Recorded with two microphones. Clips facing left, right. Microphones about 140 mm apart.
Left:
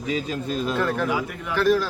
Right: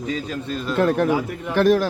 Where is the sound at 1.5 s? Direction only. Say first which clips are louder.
Right 3 dB; 50° right (ahead or behind).